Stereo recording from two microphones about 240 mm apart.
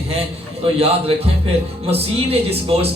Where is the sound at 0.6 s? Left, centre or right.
Right.